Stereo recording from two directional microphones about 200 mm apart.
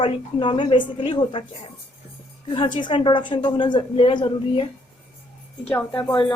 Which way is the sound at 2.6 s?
25° left (ahead or behind).